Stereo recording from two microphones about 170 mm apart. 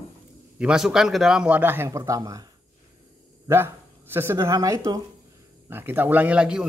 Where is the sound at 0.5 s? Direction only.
5° right (ahead or behind).